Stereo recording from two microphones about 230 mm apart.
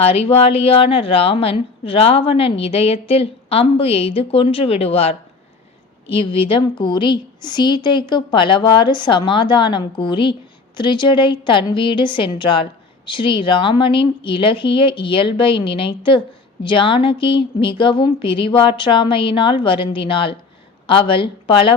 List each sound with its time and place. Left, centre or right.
0.0 s a woman's voice: left